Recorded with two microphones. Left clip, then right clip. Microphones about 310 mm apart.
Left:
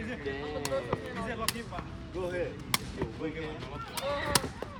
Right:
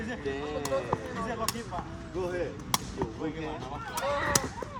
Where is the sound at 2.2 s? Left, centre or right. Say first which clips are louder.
Right 1 dB; right.